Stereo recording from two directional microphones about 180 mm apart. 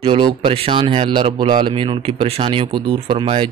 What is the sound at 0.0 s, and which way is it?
Speech, 30° right (ahead or behind).